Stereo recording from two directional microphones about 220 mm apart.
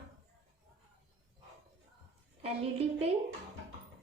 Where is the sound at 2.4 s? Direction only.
30° right (ahead or behind).